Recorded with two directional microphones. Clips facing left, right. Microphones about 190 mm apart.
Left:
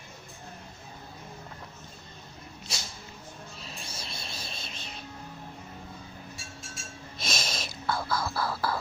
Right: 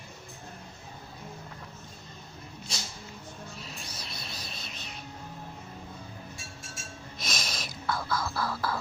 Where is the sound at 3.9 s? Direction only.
25° left (ahead or behind).